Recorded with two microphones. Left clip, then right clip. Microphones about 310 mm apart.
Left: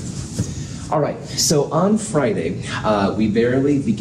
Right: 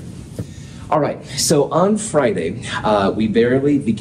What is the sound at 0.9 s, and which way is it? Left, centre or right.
A man's voice, right.